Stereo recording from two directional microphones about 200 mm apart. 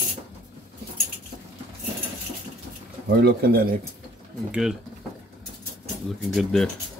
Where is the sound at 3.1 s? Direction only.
50° right (ahead or behind).